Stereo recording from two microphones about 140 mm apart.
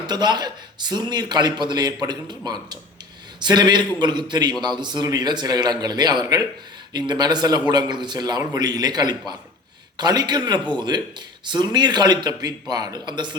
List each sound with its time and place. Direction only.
0.1 s a man's voice: 30° right (ahead or behind)